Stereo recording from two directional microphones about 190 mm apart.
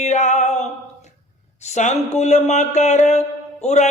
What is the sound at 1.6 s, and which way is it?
Speech, 40° left (ahead or behind).